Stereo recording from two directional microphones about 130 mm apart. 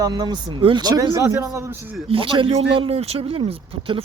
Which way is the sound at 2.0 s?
45° right (ahead or behind).